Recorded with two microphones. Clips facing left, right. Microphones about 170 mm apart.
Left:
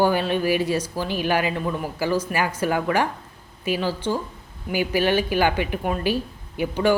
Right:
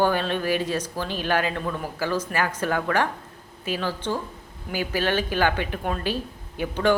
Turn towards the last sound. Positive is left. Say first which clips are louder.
# left 2 dB
turn(degrees=10)  # may be behind; listen again after turning